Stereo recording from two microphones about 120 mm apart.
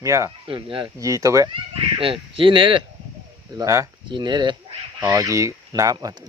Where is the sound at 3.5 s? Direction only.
25° right (ahead or behind).